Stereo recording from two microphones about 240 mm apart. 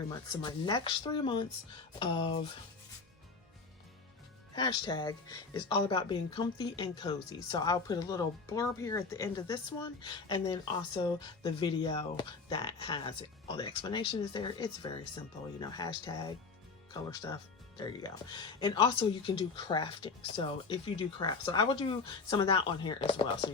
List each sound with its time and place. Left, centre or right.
0.1 s speech: centre
4.5 s speech: centre